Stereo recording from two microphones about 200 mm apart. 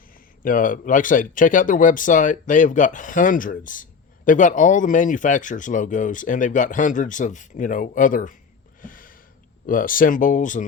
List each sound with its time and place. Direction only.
0.1 s speech: 45° left (ahead or behind)
8.8 s gasp: 45° left (ahead or behind)
9.6 s speech: 45° left (ahead or behind)